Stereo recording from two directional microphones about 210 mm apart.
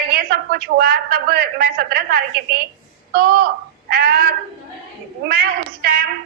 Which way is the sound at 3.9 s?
45° right (ahead or behind).